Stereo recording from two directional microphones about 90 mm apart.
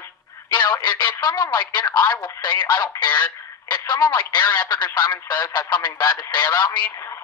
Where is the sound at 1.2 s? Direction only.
50° left (ahead or behind).